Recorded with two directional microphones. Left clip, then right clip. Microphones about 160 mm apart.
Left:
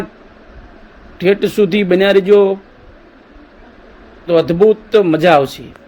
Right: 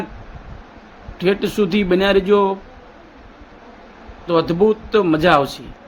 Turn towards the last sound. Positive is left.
turn(degrees=20)  # may be behind; listen again after turning